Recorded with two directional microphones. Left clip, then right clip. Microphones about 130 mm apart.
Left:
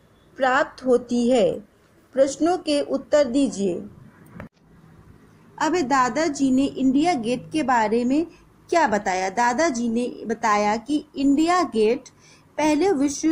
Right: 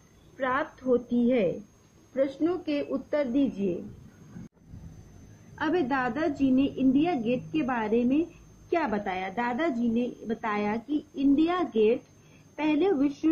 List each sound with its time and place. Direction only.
0.4 s a woman's voice: 35° left (ahead or behind)
5.6 s a woman's voice: 35° left (ahead or behind)